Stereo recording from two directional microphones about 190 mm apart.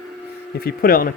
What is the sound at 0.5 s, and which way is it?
Speech, 50° left (ahead or behind).